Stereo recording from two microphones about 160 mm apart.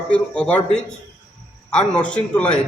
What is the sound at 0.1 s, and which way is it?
A man's voice, 5° left (ahead or behind).